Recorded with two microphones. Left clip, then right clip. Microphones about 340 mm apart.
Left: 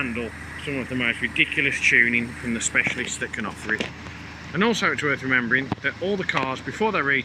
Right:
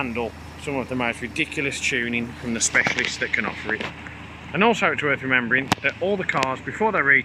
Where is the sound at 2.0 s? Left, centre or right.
Centre.